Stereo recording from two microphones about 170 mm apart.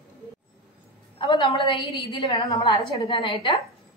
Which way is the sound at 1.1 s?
30° left (ahead or behind).